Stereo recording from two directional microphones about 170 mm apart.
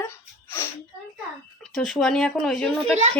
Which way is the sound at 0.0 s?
15° left (ahead or behind).